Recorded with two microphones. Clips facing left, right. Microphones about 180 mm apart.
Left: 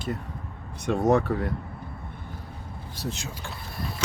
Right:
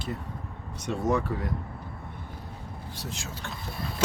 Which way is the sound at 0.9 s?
45° left (ahead or behind).